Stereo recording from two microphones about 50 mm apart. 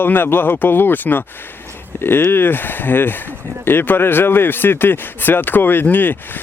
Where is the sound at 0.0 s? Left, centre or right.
Left.